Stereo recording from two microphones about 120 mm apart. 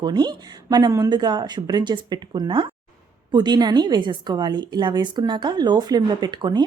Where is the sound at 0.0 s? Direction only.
35° right (ahead or behind).